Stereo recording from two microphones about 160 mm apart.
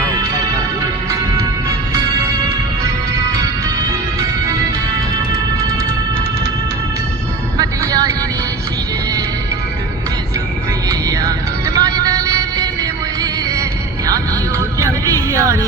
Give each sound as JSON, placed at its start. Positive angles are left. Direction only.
{"t": 7.6, "sound": "music", "side_deg": -20}
{"t": 10.8, "sound": "music", "side_deg": -20}
{"t": 14.8, "sound": "music", "side_deg": -20}